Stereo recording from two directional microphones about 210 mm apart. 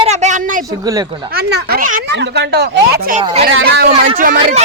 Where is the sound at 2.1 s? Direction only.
55° right (ahead or behind).